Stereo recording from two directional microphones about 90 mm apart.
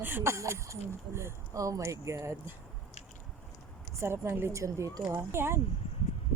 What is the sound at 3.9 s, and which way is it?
Speech, 30° right (ahead or behind).